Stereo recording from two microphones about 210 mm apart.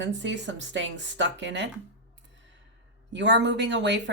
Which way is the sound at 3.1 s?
60° right (ahead or behind).